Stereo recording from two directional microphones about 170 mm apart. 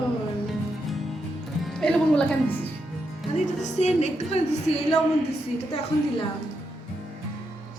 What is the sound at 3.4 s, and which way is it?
Speech, 45° left (ahead or behind).